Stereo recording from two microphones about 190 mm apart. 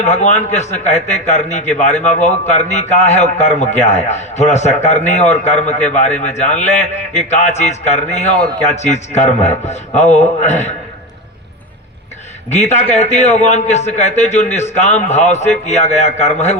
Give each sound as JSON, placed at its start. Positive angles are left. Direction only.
{"t": 0.0, "sound": "a man's voice", "side_deg": 35}
{"t": 12.5, "sound": "a man's voice", "side_deg": 35}